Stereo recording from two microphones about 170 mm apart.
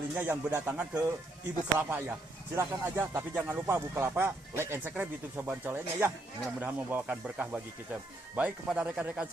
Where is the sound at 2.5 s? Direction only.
15° right (ahead or behind).